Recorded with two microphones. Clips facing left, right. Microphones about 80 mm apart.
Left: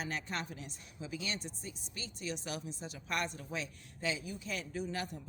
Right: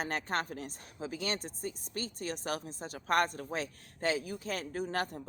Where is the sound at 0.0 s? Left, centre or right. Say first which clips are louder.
Right 5 dB; right.